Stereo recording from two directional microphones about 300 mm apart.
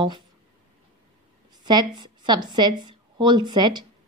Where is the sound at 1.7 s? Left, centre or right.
Centre.